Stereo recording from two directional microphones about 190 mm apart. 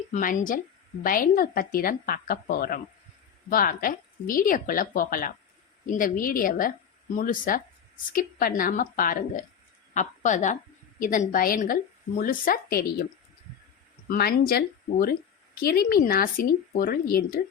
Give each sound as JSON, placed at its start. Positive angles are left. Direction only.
{"t": 0.1, "sound": "a woman's voice", "side_deg": 45}
{"t": 14.1, "sound": "a woman's voice", "side_deg": 50}